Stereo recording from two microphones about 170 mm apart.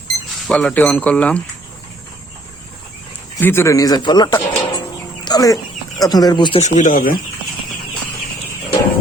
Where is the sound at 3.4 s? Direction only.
15° left (ahead or behind).